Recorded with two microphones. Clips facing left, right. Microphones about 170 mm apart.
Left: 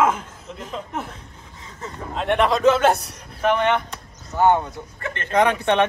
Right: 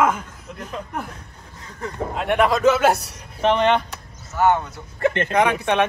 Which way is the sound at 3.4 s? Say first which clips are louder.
Right 2 dB; 30° right (ahead or behind).